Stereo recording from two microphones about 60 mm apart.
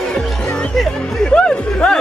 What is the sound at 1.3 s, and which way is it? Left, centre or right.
Music, centre.